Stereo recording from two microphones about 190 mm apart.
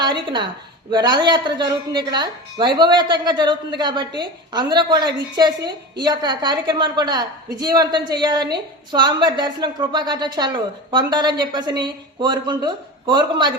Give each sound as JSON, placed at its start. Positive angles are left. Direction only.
{"t": 0.0, "sound": "a woman's voice", "side_deg": -25}